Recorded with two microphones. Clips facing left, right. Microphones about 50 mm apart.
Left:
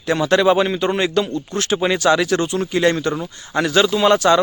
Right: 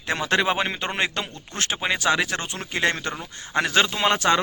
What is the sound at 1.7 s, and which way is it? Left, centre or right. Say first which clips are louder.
A man's voice: left 6 dB; centre.